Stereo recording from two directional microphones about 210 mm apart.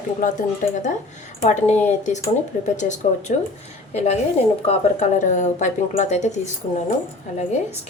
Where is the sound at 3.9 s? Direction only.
30° left (ahead or behind).